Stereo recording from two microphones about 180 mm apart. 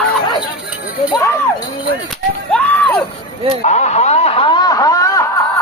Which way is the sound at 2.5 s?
10° left (ahead or behind).